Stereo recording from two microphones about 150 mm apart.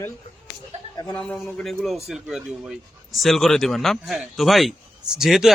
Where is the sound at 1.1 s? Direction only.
10° left (ahead or behind).